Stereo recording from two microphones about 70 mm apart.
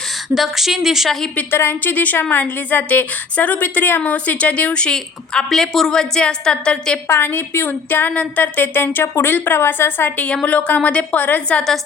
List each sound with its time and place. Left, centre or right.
0.3 s speech: centre
1.5 s a woman's voice: left; by 7.0 s centre
7.1 s a woman's voice: left
10.2 s a woman's voice: centre